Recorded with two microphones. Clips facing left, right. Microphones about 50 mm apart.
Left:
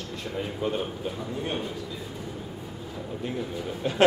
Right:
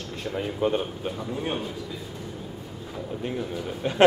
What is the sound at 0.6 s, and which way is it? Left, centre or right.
Speech, right.